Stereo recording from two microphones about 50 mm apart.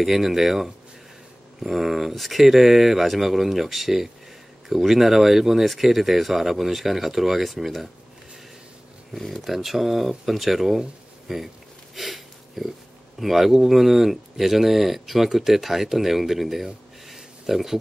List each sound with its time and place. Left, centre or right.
0.0 s speech: centre
9.1 s speech: centre